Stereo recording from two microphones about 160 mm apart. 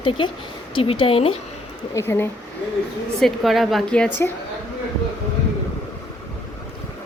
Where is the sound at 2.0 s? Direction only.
15° left (ahead or behind).